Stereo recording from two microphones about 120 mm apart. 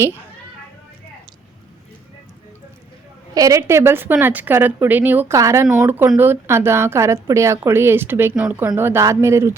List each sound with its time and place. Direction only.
3.3 s a woman's voice: 30° right (ahead or behind)